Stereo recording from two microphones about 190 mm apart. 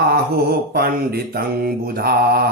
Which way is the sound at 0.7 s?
55° right (ahead or behind).